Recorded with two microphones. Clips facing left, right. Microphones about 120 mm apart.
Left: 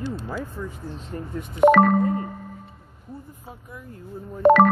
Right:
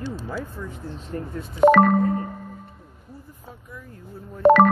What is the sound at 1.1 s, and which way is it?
Speech, 20° left (ahead or behind).